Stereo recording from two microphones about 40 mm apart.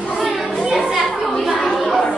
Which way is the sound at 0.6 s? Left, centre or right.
Centre.